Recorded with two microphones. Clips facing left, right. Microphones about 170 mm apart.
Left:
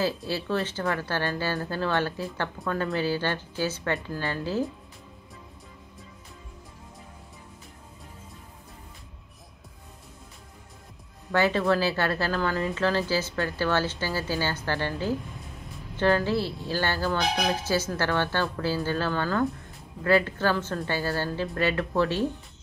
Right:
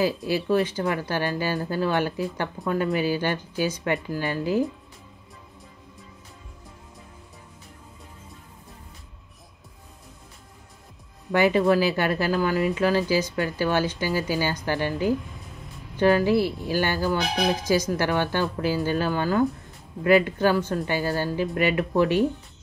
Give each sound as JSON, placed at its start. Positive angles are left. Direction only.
{"t": 0.0, "sound": "speech", "side_deg": -15}
{"t": 11.3, "sound": "speech", "side_deg": -15}